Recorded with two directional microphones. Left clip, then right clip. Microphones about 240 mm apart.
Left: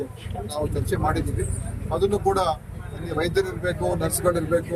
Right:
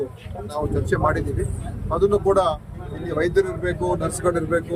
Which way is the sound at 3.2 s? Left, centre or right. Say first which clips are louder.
Right 4 dB; centre.